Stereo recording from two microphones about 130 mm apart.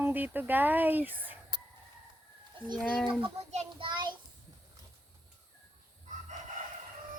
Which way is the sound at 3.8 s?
35° right (ahead or behind).